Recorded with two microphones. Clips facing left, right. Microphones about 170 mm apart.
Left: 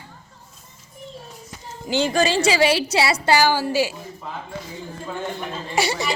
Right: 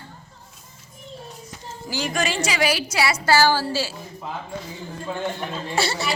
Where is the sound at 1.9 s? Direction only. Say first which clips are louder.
Left 6 dB; 25° left (ahead or behind).